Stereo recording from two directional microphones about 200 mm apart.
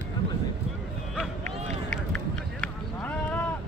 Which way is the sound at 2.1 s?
5° left (ahead or behind).